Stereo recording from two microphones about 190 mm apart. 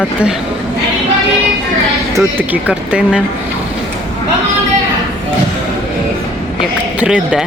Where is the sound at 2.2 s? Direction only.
10° right (ahead or behind).